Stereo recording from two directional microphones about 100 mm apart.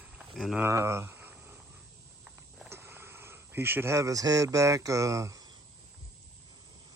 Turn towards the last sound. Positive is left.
turn(degrees=-30)  # may be behind; listen again after turning